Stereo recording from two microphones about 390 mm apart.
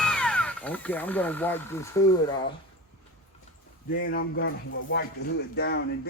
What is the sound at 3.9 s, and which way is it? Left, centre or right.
Music, left.